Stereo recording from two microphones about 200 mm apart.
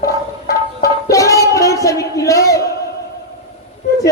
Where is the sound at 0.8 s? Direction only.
15° left (ahead or behind).